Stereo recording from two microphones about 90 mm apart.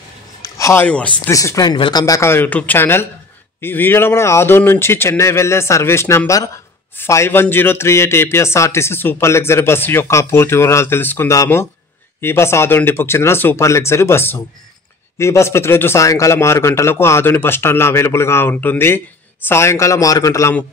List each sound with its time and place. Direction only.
0.4 s a sound: 35° left (ahead or behind)
0.8 s speech: 15° left (ahead or behind)
1.3 s speech: 35° left (ahead or behind)
1.7 s speech: 55° left (ahead or behind)
2.2 s a man's voice: 25° left (ahead or behind)